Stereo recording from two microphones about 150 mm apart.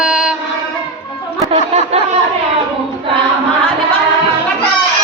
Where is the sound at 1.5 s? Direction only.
45° right (ahead or behind).